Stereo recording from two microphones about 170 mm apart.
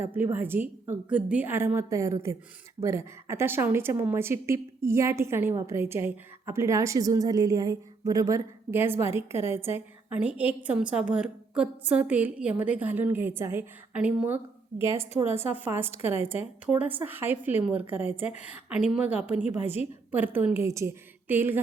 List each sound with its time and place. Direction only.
0.0 s a woman's voice: 10° right (ahead or behind)
19.6 s a woman's voice: 40° left (ahead or behind)
20.1 s a woman's voice: 10° right (ahead or behind)